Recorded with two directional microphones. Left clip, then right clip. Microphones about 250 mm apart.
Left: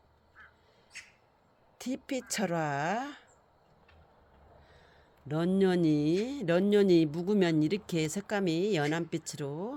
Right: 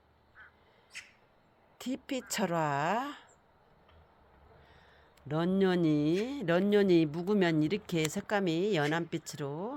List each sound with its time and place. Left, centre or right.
0.9 s a sound: right
1.8 s speech: centre
5.3 s speech: centre